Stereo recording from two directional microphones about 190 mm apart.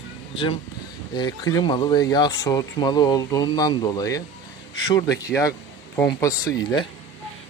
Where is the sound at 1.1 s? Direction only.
20° left (ahead or behind).